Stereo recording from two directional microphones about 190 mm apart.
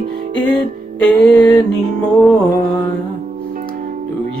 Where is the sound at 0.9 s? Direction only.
5° left (ahead or behind).